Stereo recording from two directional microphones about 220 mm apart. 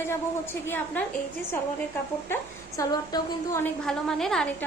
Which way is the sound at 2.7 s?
15° left (ahead or behind).